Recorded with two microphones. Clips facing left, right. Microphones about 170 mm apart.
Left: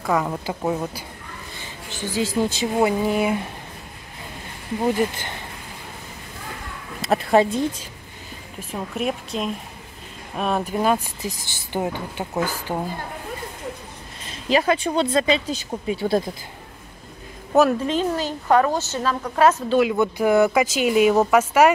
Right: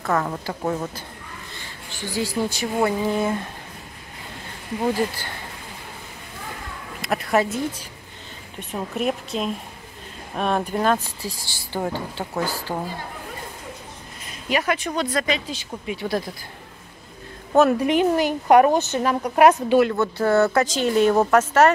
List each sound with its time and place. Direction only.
0.0 s speech: 10° left (ahead or behind)
1.6 s a sound: 20° left (ahead or behind)
2.1 s speech: 20° left (ahead or behind)
4.8 s speech: 20° left (ahead or behind)
7.1 s speech: 25° left (ahead or behind)
8.5 s a woman's voice: centre (ahead or behind)
11.2 s speech: 20° left (ahead or behind)
14.2 s speech: 30° left (ahead or behind)
17.7 s speech: 15° right (ahead or behind)
19.8 s speech: 10° left (ahead or behind)